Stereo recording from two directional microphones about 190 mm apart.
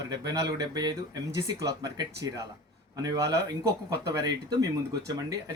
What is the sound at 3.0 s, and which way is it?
Speech, 20° right (ahead or behind).